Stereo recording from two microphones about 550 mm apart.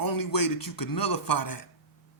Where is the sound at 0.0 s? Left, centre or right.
Left.